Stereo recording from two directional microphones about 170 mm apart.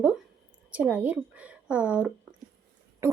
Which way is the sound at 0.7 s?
10° right (ahead or behind).